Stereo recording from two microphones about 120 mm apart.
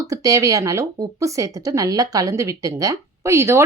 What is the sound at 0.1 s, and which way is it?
Speech, 30° right (ahead or behind).